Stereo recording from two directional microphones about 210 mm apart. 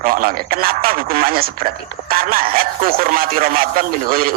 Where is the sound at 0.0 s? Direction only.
40° right (ahead or behind).